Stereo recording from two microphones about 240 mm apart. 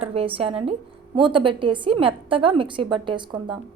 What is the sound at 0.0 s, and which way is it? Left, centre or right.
A woman's voice, right.